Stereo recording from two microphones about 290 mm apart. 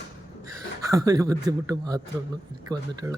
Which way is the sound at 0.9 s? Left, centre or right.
Centre.